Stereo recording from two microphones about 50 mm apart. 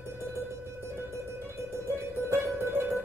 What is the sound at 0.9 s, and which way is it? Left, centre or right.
Music, right.